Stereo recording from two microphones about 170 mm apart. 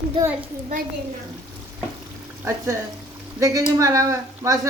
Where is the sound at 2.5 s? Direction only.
15° right (ahead or behind).